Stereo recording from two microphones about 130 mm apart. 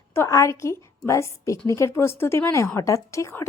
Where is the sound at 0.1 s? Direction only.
25° left (ahead or behind).